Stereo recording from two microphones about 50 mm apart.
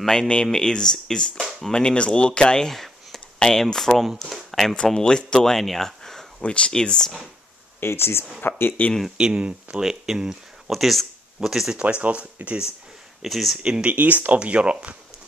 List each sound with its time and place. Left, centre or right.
0.0 s speech: centre
2.7 s a sound: centre
3.3 s speech: centre
4.5 s a sound: centre
5.0 s speech: centre
6.4 s speech: left
7.8 s speech: left
9.0 s speech: centre
11.8 s speech: right
13.2 s speech: centre
13.6 s speech: right
13.9 s speech: right
14.4 s speech: right